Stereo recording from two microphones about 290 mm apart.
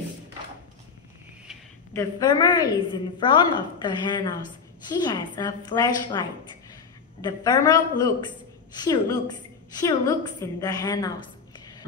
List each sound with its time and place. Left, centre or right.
2.0 s a woman's voice: centre